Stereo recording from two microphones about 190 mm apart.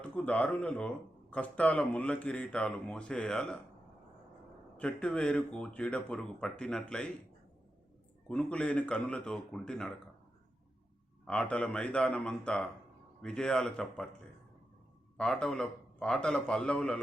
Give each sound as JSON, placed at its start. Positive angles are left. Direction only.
{"t": 0.0, "sound": "speech", "side_deg": 5}
{"t": 4.8, "sound": "speech", "side_deg": 5}
{"t": 8.3, "sound": "speech", "side_deg": 5}
{"t": 11.3, "sound": "speech", "side_deg": 5}
{"t": 15.2, "sound": "speech", "side_deg": 5}